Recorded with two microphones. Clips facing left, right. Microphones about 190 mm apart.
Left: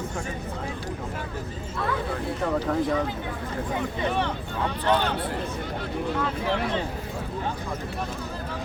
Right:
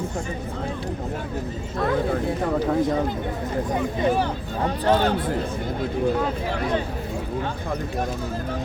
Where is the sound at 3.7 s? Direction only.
35° right (ahead or behind).